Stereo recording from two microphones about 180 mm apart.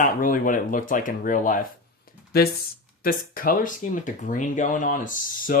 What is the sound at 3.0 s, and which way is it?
Speech, 50° left (ahead or behind).